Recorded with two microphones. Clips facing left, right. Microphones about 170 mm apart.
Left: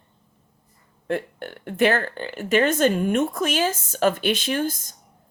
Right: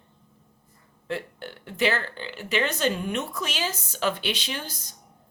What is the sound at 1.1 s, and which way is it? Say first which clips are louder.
A woman's voice: left 6 dB; 50° left (ahead or behind).